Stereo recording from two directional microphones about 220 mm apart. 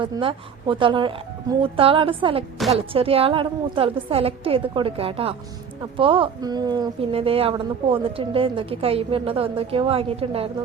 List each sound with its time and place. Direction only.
0.0 s speech: 25° right (ahead or behind)